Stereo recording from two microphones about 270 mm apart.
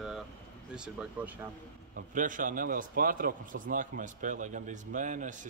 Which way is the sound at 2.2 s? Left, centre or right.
Right.